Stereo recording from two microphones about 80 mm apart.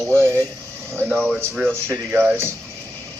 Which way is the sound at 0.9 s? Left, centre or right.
Right.